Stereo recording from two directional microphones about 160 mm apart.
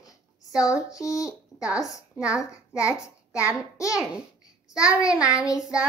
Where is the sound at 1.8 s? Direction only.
5° right (ahead or behind).